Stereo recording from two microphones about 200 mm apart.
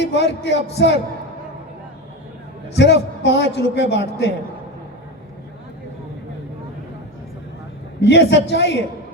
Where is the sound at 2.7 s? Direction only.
60° left (ahead or behind).